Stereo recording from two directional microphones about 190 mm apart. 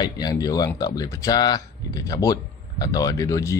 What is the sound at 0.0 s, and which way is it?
Speech, 20° left (ahead or behind).